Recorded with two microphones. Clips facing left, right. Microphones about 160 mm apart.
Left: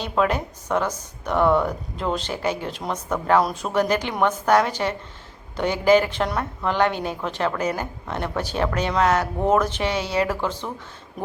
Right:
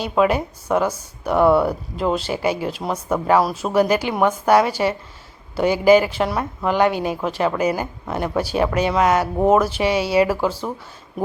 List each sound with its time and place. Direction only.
0.0 s speech: 10° right (ahead or behind)